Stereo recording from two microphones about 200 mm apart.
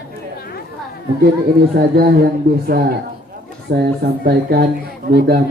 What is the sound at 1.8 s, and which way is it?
A woman's voice, 50° right (ahead or behind).